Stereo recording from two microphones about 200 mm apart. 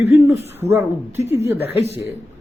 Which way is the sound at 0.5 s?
10° right (ahead or behind).